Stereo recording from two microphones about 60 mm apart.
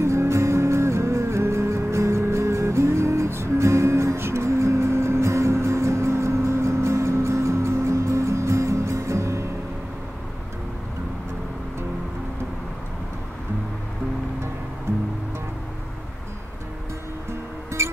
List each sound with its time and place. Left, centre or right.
0.0 s music: right
17.8 s music: right